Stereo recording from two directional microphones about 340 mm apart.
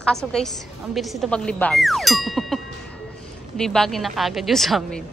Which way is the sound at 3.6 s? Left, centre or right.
Centre.